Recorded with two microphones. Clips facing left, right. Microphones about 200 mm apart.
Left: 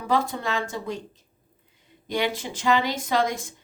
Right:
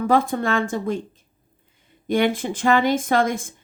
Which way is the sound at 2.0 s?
55° right (ahead or behind).